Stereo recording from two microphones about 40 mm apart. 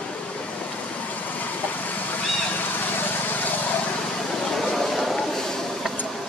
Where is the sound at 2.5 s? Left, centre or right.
Left.